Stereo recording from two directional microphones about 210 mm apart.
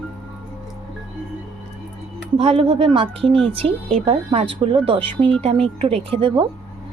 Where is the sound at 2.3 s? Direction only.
30° right (ahead or behind).